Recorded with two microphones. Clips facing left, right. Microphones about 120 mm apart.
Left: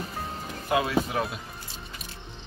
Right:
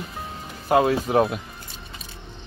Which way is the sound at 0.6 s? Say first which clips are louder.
Right 6 dB; 45° right (ahead or behind).